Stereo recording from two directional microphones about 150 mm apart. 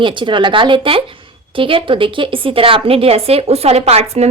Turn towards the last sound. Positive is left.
turn(degrees=-45)  # may be behind; listen again after turning